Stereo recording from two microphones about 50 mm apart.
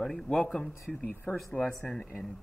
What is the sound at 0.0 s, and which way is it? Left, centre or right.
Speech, centre.